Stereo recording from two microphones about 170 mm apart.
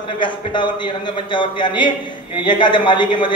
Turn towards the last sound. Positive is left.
turn(degrees=30)  # may be behind; listen again after turning